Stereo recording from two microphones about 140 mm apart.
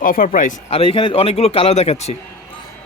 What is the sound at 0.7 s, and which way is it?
A man's voice, 40° left (ahead or behind).